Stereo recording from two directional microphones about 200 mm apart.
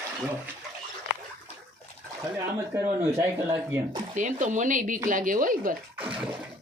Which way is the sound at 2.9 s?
15° right (ahead or behind).